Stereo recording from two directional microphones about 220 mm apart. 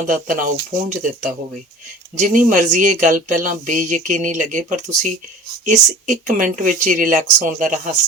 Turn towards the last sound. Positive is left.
turn(degrees=-35)  # may be behind; listen again after turning